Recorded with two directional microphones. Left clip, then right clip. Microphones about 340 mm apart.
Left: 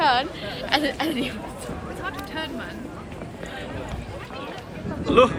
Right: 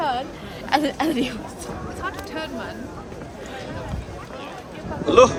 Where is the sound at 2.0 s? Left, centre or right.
Centre.